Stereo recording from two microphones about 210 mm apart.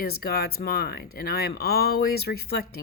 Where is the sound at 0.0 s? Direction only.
45° left (ahead or behind).